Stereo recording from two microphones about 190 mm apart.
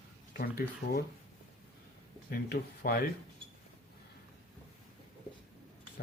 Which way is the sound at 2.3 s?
55° left (ahead or behind).